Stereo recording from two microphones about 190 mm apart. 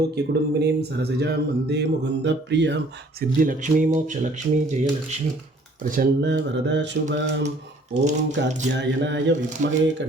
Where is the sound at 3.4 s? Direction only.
45° right (ahead or behind).